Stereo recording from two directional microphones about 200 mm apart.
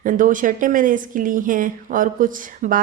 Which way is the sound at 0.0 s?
40° right (ahead or behind).